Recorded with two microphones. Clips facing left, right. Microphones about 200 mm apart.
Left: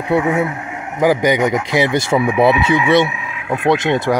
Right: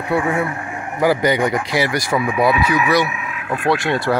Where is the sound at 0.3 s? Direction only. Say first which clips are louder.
Left 3 dB; 20° left (ahead or behind).